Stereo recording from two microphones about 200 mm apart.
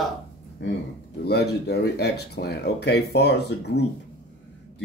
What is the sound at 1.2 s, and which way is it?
Speech, 55° left (ahead or behind).